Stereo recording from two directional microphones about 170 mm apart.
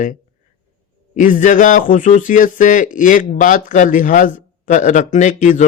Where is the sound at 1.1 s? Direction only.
50° left (ahead or behind).